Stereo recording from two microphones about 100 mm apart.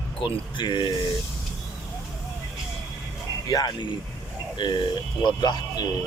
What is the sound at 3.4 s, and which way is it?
Speech, 40° left (ahead or behind).